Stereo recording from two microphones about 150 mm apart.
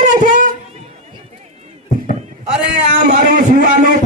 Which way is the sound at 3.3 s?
65° right (ahead or behind).